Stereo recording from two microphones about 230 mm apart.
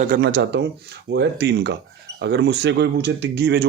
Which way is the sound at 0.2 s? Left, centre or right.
Right.